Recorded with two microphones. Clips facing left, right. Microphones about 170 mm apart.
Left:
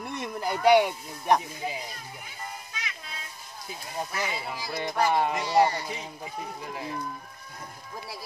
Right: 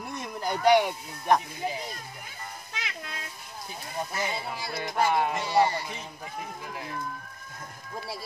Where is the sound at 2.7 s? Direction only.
65° right (ahead or behind).